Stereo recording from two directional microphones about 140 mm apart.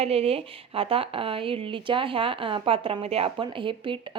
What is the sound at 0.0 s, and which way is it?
Speech, 45° right (ahead or behind).